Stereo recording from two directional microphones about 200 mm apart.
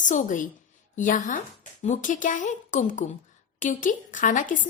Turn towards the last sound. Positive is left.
turn(degrees=40)  # may be behind; listen again after turning